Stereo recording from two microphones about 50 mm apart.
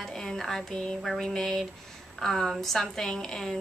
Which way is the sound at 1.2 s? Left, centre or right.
Centre.